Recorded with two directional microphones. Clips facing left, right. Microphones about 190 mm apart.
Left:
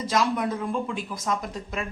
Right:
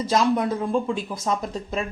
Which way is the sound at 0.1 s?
30° right (ahead or behind).